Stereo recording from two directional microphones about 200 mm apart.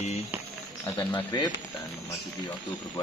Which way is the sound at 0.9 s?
15° left (ahead or behind).